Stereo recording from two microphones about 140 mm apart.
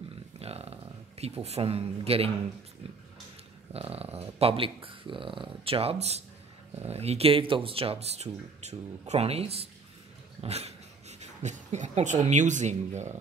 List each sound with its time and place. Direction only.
0.4 s speech: 45° right (ahead or behind)
3.7 s speech: 45° right (ahead or behind)